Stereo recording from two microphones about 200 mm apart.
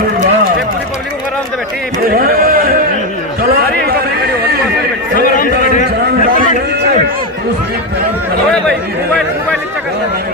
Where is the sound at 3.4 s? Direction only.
50° right (ahead or behind).